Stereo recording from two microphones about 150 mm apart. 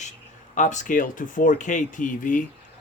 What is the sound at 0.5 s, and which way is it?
Speech, 55° left (ahead or behind).